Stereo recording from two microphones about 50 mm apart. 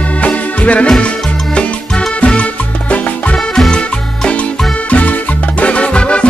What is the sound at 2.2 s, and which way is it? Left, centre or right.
Music, left.